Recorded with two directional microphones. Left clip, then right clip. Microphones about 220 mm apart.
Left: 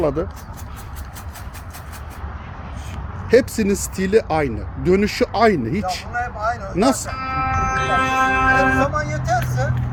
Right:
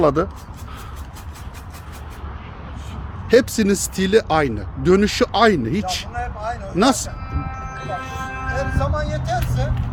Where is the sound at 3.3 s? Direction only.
15° right (ahead or behind).